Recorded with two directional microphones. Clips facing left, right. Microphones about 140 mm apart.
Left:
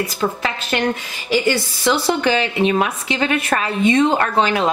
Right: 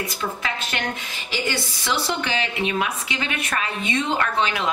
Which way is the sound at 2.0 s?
35° left (ahead or behind).